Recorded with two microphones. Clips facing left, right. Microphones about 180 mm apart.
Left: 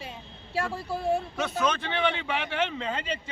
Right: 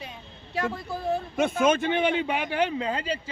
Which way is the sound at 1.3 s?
50° right (ahead or behind).